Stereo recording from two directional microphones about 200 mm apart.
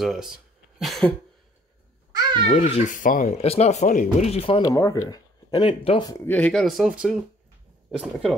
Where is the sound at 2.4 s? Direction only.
30° left (ahead or behind).